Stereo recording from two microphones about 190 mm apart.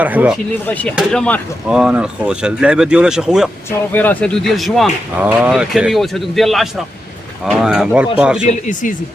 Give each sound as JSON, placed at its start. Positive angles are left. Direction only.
{"t": 0.0, "sound": "speech", "side_deg": -10}
{"t": 0.7, "sound": "speech", "side_deg": 10}
{"t": 3.7, "sound": "speech", "side_deg": 10}
{"t": 8.4, "sound": "speech", "side_deg": 40}